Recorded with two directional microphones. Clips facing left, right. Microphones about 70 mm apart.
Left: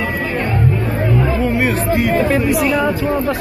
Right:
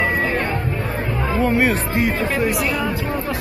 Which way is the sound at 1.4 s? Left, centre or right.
Right.